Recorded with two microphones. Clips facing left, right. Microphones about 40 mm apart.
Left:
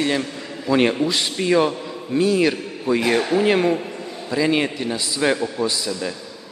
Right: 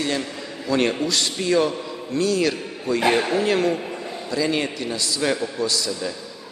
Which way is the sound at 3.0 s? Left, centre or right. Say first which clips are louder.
Right 2 dB; centre.